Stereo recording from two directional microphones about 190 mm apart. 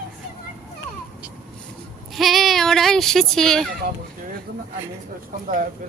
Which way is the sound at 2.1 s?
Centre (ahead or behind).